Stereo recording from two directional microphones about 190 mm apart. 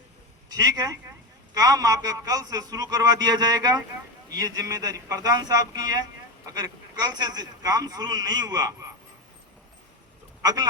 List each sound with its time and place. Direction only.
0.5 s a man's voice: 20° right (ahead or behind)
10.4 s speech: 20° right (ahead or behind)